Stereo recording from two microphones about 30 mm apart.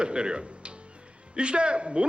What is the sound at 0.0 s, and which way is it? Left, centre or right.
A man's voice, right.